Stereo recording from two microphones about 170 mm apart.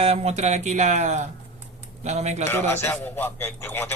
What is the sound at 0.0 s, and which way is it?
A man's voice, 35° right (ahead or behind).